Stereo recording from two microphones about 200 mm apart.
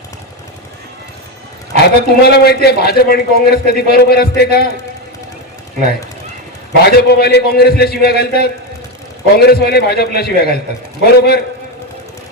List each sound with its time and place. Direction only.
1.8 s a man's voice: 55° left (ahead or behind)
6.8 s a man's voice: 55° left (ahead or behind)